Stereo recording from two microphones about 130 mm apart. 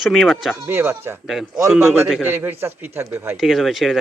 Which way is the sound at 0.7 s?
20° right (ahead or behind).